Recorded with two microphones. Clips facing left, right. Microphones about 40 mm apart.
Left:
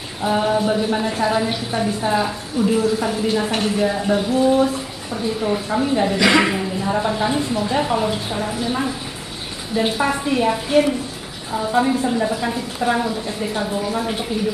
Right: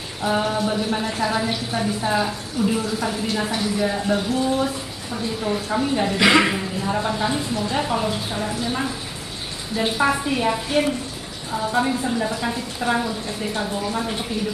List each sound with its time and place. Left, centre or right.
0.2 s a woman's voice: centre
3.5 s speech: left
3.8 s a woman's voice: centre